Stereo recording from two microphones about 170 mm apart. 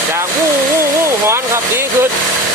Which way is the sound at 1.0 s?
15° right (ahead or behind).